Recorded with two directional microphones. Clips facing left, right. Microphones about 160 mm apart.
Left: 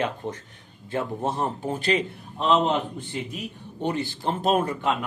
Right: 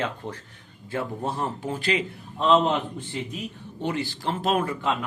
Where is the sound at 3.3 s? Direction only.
15° left (ahead or behind).